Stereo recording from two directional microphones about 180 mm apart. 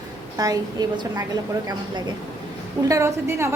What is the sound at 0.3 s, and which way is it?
Speech, 20° right (ahead or behind).